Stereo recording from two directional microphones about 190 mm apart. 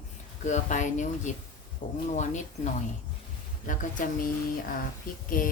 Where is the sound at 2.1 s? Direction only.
40° left (ahead or behind).